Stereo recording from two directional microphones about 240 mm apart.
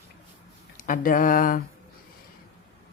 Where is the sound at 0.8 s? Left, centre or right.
Left.